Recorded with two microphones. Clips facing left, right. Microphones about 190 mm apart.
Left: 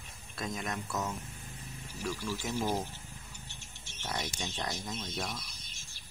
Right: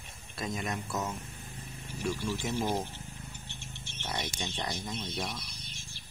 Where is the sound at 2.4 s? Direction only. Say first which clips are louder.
Right 1 dB; 15° right (ahead or behind).